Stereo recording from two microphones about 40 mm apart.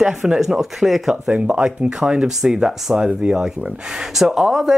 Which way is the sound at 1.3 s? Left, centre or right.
Right.